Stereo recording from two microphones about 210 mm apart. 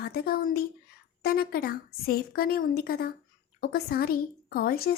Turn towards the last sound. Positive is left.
turn(degrees=45)  # may be behind; listen again after turning